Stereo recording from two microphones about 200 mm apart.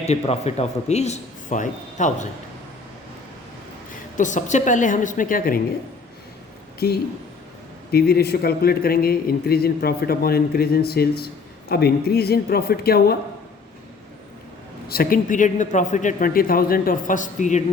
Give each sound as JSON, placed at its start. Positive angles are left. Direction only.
{"t": 0.1, "sound": "a man's voice", "side_deg": 30}
{"t": 4.2, "sound": "a man's voice", "side_deg": 40}
{"t": 6.7, "sound": "speech", "side_deg": 50}
{"t": 14.8, "sound": "a man's voice", "side_deg": 45}